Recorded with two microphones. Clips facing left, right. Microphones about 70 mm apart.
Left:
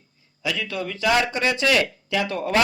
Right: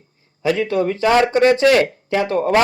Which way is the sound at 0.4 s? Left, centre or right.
Right.